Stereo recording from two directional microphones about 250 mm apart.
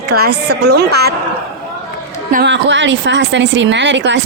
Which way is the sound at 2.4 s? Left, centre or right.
Right.